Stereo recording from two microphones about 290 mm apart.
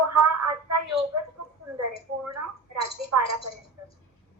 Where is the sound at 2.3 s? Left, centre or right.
Right.